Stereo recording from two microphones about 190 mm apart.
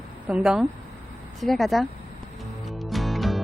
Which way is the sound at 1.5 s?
Centre (ahead or behind).